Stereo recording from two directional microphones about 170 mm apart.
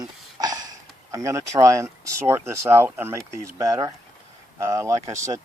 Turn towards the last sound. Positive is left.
turn(degrees=-20)  # may be behind; listen again after turning